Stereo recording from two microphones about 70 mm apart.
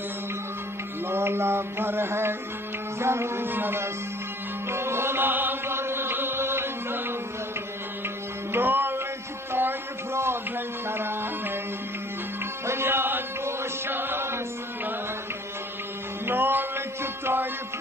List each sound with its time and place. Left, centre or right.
1.0 s mantra: right
4.6 s music: right
8.5 s music: right
9.5 s a sound: right
10.9 s music: right
12.6 s chant: right
16.3 s music: right